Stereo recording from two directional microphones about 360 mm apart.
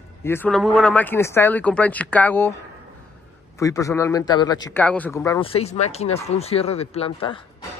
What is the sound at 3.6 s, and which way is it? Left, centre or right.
A man's voice, centre.